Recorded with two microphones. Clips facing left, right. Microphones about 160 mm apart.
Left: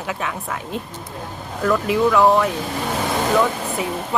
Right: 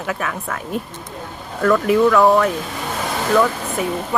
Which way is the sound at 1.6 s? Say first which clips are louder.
Right 3 dB; 20° left (ahead or behind).